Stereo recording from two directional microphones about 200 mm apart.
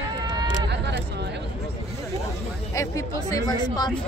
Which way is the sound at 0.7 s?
60° right (ahead or behind).